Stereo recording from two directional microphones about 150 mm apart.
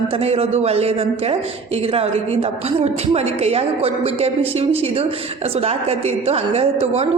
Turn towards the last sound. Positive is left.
turn(degrees=-45)  # may be behind; listen again after turning